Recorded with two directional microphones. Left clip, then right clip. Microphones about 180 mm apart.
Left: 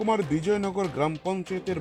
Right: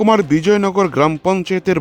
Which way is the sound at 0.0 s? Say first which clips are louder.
Right 12 dB; 65° right (ahead or behind).